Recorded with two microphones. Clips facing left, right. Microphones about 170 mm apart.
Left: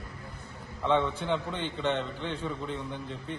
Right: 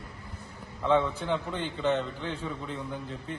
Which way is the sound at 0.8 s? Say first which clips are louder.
Right 1 dB; centre (ahead or behind).